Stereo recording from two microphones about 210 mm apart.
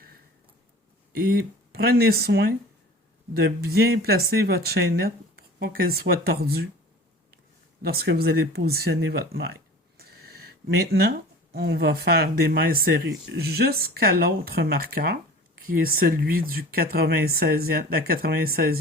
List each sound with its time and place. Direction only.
1.1 s speech: 45° right (ahead or behind)
7.8 s speech: 45° right (ahead or behind)
10.0 s a sound: 45° right (ahead or behind)
11.5 s speech: 50° right (ahead or behind)